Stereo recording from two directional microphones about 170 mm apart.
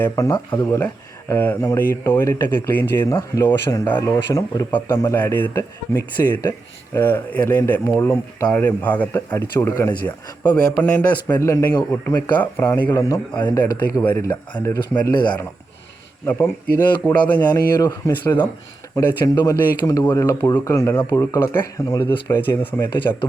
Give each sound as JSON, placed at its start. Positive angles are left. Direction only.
{"t": 0.0, "sound": "speech", "side_deg": 20}
{"t": 10.8, "sound": "speech", "side_deg": 10}